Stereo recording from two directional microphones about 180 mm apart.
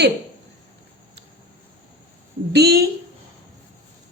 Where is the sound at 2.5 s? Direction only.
60° right (ahead or behind).